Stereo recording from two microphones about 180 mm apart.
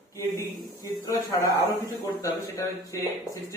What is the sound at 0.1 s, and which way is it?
Speech, 15° left (ahead or behind).